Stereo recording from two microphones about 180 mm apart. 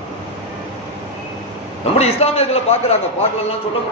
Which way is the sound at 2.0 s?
35° left (ahead or behind).